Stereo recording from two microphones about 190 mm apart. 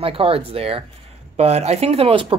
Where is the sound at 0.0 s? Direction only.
30° right (ahead or behind).